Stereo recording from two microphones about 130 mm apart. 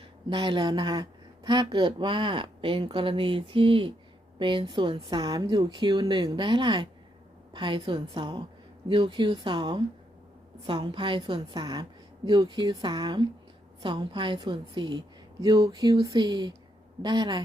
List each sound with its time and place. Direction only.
0.3 s a woman's voice: 40° right (ahead or behind)